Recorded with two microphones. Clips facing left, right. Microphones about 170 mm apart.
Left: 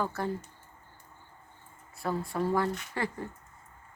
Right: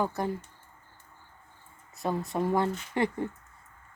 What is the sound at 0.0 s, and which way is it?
Speech, 15° right (ahead or behind).